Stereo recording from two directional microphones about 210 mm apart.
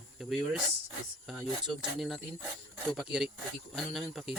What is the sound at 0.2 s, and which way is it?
Speech, centre (ahead or behind).